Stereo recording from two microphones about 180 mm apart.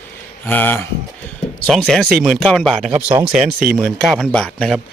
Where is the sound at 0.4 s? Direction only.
10° left (ahead or behind).